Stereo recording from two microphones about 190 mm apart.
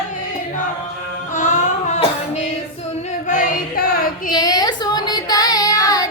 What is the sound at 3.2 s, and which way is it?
Music, 45° left (ahead or behind).